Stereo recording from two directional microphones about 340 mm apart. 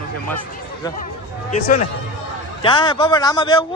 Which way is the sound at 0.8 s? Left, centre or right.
Centre.